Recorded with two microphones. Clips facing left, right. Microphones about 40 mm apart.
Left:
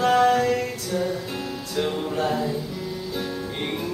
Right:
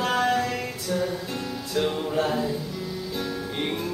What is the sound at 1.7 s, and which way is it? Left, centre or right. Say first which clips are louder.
Music: right 1 dB; centre.